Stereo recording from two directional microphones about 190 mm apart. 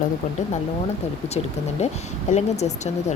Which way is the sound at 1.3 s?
35° left (ahead or behind).